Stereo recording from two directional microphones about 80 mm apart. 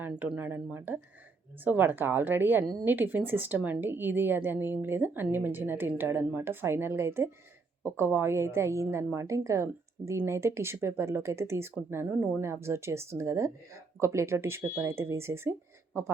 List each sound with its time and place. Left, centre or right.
0.0 s a woman's voice: right